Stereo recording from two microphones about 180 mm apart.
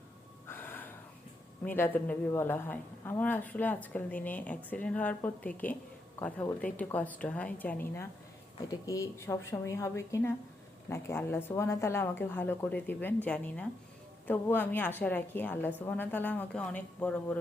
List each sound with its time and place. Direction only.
0.4 s gasp: 10° left (ahead or behind)
1.6 s a woman's voice: 10° left (ahead or behind)